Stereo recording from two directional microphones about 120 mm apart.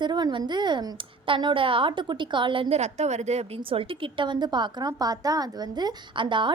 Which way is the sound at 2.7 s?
70° right (ahead or behind).